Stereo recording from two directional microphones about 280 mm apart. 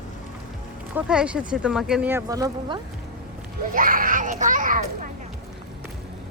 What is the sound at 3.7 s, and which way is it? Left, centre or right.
A child's voice, right.